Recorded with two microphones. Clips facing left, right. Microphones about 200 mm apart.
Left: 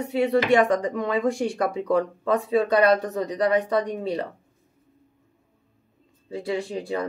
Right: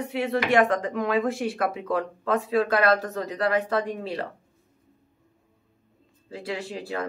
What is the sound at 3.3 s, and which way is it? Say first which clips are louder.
Speech: left 3 dB; 20° left (ahead or behind).